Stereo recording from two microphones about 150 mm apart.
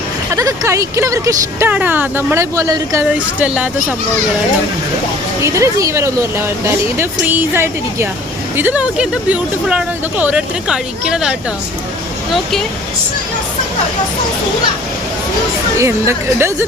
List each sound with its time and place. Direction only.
0.3 s speech: 20° right (ahead or behind)
3.3 s speech: 10° right (ahead or behind)
5.4 s speech: 20° right (ahead or behind)
15.8 s speech: 15° right (ahead or behind)